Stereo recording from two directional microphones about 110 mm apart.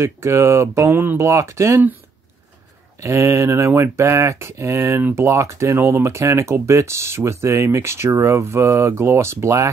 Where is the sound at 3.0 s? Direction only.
25° right (ahead or behind).